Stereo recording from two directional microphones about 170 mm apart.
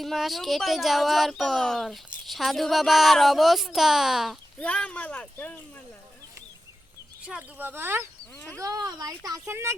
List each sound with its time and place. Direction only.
0.0 s speech: centre (ahead or behind)
7.3 s speech: 10° right (ahead or behind)